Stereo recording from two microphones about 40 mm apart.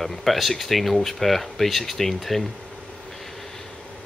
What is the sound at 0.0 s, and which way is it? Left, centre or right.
Speech, centre.